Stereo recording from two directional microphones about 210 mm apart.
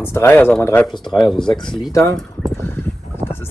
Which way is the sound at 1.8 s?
15° left (ahead or behind).